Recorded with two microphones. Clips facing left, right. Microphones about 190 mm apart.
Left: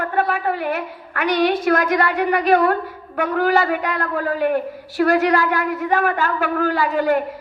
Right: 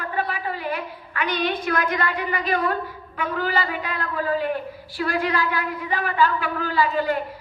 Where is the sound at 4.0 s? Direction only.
50° left (ahead or behind).